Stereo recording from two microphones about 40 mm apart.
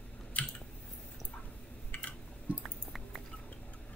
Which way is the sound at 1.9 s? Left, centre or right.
Left.